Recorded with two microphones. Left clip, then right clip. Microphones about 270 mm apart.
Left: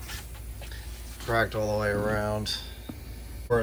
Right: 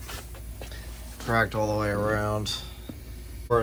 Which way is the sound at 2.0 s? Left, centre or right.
Left.